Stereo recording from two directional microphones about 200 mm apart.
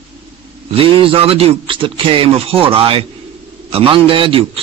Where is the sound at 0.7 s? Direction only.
25° right (ahead or behind).